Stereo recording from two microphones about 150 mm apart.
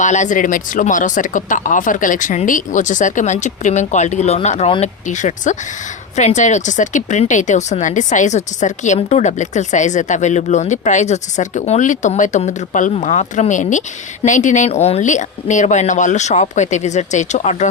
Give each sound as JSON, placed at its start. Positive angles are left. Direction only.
{"t": 0.0, "sound": "speech", "side_deg": 55}